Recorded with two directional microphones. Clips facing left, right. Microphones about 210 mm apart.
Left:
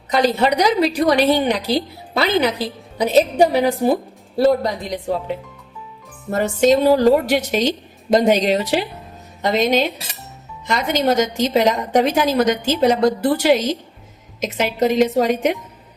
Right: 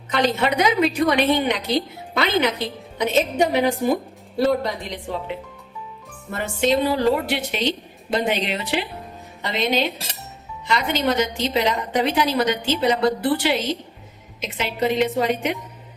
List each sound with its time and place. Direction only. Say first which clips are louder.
0.1 s a woman's voice: left 4 dB; 35° left (ahead or behind)